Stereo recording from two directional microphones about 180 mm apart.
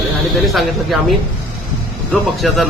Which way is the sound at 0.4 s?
Centre (ahead or behind).